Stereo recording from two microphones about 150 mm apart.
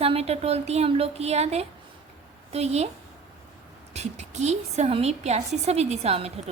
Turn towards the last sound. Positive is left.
turn(degrees=-45)  # may be behind; listen again after turning